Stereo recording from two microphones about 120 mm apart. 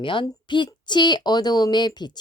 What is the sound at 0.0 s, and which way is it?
Speech, 45° left (ahead or behind).